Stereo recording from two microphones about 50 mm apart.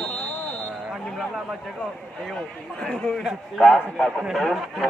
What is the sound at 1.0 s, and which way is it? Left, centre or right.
Speech, centre.